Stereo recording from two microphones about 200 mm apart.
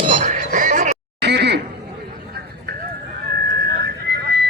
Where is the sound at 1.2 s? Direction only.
55° right (ahead or behind).